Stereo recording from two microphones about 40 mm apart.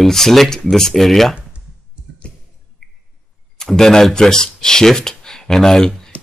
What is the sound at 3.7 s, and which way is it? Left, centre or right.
Speech, centre.